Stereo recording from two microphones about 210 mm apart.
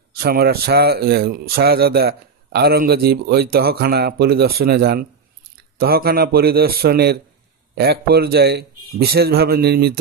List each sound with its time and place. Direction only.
0.2 s speech: 45° right (ahead or behind)